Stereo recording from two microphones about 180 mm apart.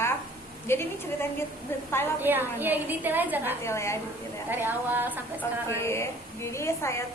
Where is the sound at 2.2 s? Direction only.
10° right (ahead or behind).